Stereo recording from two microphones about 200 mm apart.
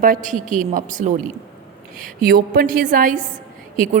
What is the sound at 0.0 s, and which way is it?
A woman's voice, 40° right (ahead or behind).